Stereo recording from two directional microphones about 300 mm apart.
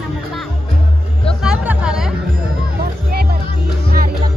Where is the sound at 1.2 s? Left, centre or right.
Centre.